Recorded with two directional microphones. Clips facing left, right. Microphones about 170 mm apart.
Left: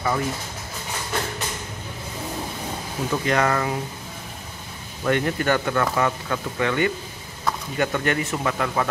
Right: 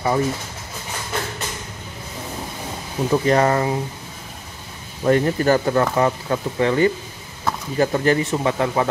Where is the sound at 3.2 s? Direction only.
30° right (ahead or behind).